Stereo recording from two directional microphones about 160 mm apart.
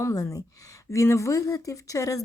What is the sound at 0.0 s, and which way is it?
A woman's voice, 20° left (ahead or behind).